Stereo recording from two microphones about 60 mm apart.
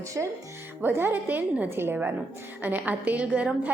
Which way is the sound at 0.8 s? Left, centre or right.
Right.